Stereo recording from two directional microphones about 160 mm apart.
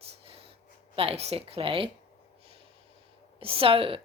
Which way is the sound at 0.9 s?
40° right (ahead or behind).